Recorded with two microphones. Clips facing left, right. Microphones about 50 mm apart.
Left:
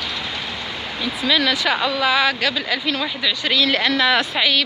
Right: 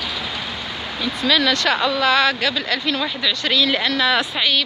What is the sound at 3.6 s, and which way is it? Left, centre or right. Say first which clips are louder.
Speech: left 1 dB; left.